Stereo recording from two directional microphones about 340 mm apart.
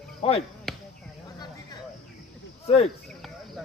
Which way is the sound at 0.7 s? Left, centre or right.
Centre.